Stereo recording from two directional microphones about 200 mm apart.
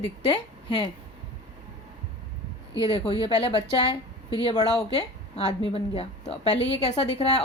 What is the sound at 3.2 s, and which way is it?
A woman's voice, 25° left (ahead or behind).